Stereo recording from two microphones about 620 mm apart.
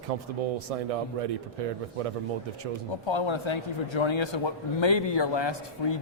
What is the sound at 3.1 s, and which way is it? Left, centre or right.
A man's voice, left.